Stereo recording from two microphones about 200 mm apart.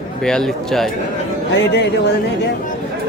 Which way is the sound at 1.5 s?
60° left (ahead or behind).